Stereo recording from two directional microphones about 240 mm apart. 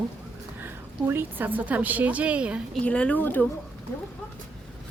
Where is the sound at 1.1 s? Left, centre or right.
Centre.